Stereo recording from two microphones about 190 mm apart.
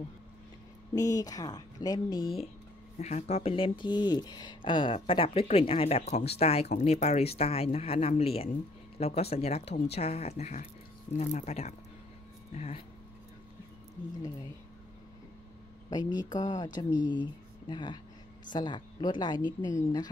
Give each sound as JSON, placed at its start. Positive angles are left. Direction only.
{"t": 0.9, "sound": "speech", "side_deg": 20}
{"t": 3.0, "sound": "speech", "side_deg": 35}
{"t": 15.9, "sound": "speech", "side_deg": 20}